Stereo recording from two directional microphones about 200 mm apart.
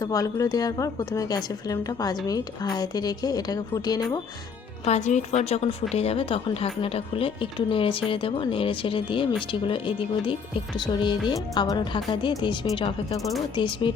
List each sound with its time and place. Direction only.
0.0 s a woman's voice: 15° left (ahead or behind)
4.9 s a woman's voice: 35° left (ahead or behind)